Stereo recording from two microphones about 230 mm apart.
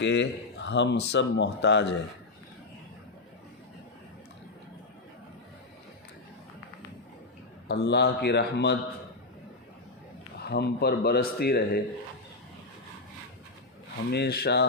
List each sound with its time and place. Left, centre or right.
0.0 s speech: left
7.7 s speech: left
10.4 s speech: left
14.1 s speech: left